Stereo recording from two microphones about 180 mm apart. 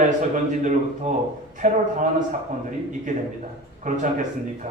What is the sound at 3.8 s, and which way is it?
Speech, 45° right (ahead or behind).